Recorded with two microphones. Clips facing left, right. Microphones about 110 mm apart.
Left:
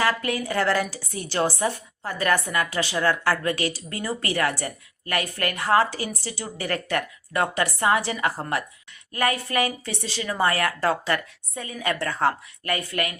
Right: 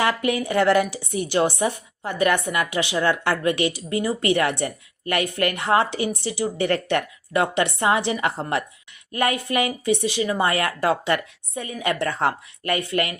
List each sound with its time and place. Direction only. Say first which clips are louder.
0.0 s a woman's voice: right 3 dB; 20° right (ahead or behind)